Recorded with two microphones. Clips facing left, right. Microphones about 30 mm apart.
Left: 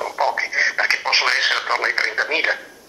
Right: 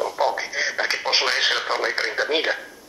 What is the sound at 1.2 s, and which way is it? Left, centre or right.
Radio, left.